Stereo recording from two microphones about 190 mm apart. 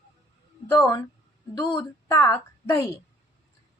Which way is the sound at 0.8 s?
15° left (ahead or behind).